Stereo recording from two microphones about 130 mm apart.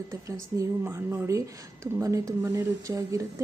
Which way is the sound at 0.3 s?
20° right (ahead or behind).